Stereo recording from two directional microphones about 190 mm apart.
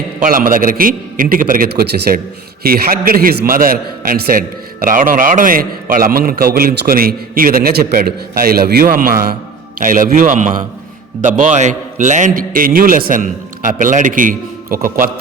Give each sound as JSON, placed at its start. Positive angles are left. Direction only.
{"t": 0.2, "sound": "a man's voice", "side_deg": -45}